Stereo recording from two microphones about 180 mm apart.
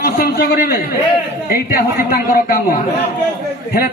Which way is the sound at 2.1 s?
50° left (ahead or behind).